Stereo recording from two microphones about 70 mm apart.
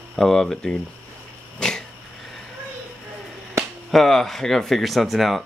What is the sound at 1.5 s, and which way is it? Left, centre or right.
Dog, centre.